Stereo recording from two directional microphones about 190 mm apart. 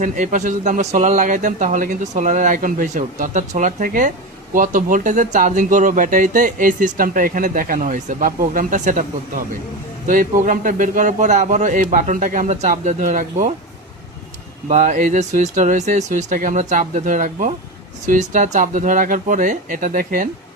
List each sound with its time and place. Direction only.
0.0 s speech: 40° right (ahead or behind)
14.7 s speech: 40° right (ahead or behind)